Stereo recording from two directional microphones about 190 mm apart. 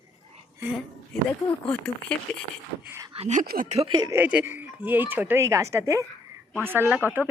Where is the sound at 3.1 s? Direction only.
35° right (ahead or behind).